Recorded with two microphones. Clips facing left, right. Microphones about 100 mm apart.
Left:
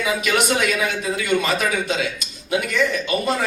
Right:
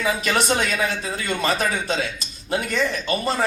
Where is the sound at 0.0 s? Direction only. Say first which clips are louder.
Left 1 dB; 35° right (ahead or behind).